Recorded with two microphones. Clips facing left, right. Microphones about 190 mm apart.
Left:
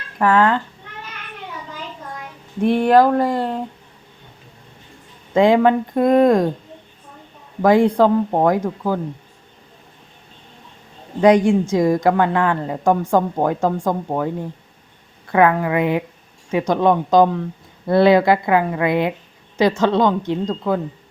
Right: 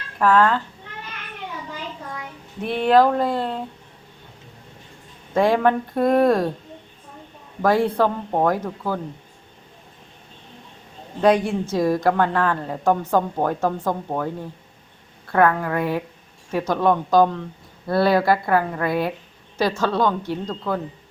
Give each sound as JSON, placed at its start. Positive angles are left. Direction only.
{"t": 0.2, "sound": "a woman's voice", "side_deg": 15}
{"t": 2.6, "sound": "a woman's voice", "side_deg": 10}
{"t": 5.3, "sound": "a woman's voice", "side_deg": 15}
{"t": 7.6, "sound": "a woman's voice", "side_deg": 15}
{"t": 11.2, "sound": "a woman's voice", "side_deg": 15}
{"t": 15.3, "sound": "a woman's voice", "side_deg": 15}